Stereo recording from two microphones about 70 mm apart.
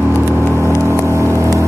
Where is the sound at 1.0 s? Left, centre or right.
Right.